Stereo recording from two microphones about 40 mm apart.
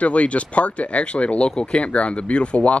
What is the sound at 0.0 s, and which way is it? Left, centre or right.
Speech, left.